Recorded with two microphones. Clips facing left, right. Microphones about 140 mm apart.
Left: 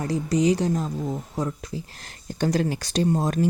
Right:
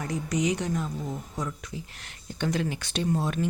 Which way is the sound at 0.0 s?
35° left (ahead or behind).